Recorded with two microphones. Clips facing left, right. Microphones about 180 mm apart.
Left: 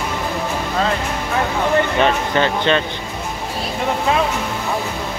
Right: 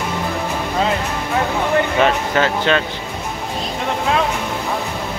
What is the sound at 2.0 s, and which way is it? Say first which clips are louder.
Speech: even; 5° right (ahead or behind).